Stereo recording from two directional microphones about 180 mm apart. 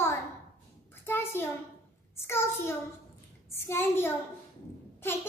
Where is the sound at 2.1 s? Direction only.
15° left (ahead or behind).